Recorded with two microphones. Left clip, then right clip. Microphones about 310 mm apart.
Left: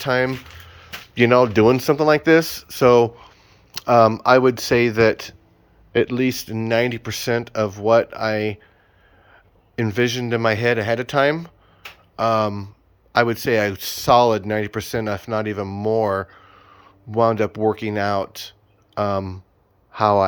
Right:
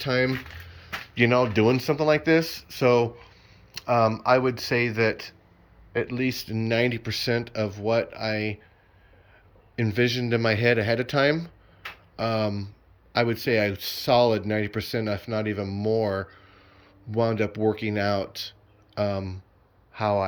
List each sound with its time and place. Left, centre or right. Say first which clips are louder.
0.0 s speech: left 5 dB; centre